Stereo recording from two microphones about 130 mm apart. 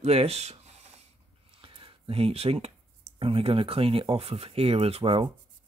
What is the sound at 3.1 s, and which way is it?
Speech, 45° right (ahead or behind).